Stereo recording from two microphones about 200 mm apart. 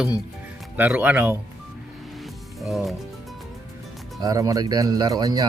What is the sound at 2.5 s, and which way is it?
Speech, centre (ahead or behind).